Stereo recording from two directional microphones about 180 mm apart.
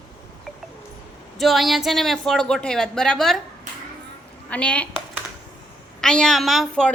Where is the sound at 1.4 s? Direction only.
Centre (ahead or behind).